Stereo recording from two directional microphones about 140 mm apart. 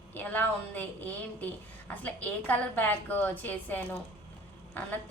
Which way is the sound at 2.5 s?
10° left (ahead or behind).